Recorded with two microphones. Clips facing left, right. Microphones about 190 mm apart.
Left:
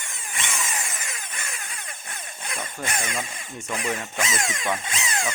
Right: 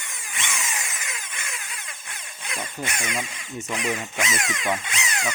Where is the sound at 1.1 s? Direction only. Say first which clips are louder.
Even; 55° left (ahead or behind).